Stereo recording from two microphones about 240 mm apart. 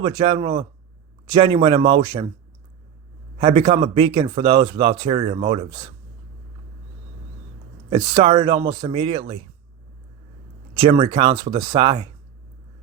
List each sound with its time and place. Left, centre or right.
0.0 s speech: right
3.3 s speech: right
7.9 s speech: right
10.8 s speech: right